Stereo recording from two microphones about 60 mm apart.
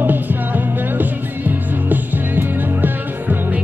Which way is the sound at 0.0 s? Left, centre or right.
Right.